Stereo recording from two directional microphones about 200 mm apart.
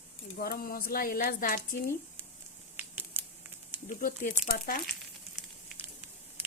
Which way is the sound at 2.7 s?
10° right (ahead or behind).